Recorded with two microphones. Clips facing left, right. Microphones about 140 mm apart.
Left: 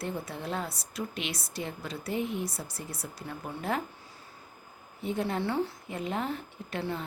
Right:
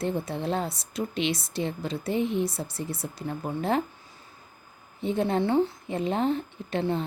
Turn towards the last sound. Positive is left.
turn(degrees=-25)  # may be behind; listen again after turning